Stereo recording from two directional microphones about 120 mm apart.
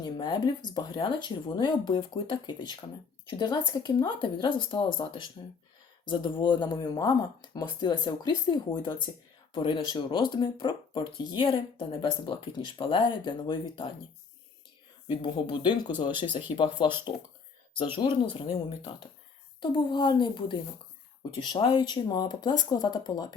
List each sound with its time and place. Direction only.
0.0 s speech: 40° left (ahead or behind)
15.0 s speech: 40° left (ahead or behind)